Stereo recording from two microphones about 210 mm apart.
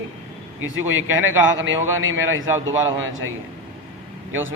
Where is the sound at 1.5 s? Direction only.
65° right (ahead or behind).